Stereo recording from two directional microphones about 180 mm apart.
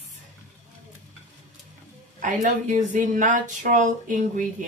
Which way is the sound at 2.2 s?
45° right (ahead or behind).